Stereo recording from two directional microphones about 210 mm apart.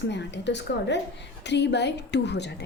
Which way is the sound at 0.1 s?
55° left (ahead or behind).